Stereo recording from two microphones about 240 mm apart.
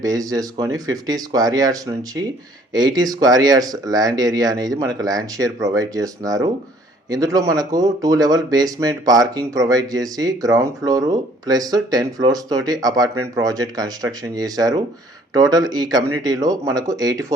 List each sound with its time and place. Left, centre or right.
0.0 s speech: centre